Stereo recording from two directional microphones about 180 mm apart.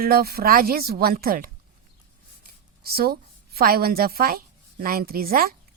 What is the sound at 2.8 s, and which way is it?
A woman's voice, 60° right (ahead or behind).